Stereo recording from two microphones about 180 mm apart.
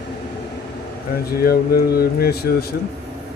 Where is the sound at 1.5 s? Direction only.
60° left (ahead or behind).